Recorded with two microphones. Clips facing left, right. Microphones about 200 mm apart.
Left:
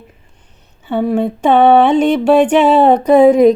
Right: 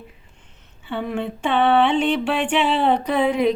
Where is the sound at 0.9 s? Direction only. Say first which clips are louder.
Left 10 dB; 40° left (ahead or behind).